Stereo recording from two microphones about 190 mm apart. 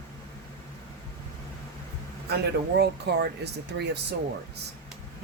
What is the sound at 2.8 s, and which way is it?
Speech, 60° right (ahead or behind).